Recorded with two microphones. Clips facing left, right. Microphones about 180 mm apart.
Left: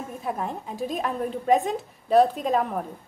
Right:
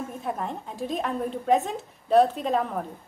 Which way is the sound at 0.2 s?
5° left (ahead or behind).